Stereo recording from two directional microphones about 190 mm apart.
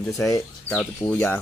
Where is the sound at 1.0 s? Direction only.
10° left (ahead or behind).